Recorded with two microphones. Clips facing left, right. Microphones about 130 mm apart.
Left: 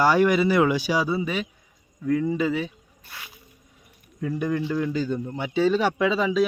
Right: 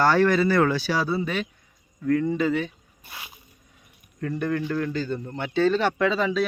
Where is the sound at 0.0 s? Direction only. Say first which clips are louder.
Even; 10° left (ahead or behind).